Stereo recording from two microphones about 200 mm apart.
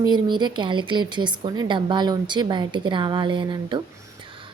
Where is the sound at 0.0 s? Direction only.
20° right (ahead or behind).